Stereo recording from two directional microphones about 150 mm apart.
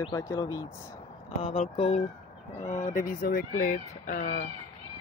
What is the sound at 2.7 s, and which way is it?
Speech, 60° left (ahead or behind).